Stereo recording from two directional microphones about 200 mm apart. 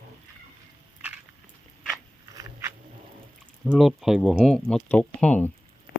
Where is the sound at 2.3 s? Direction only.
15° right (ahead or behind).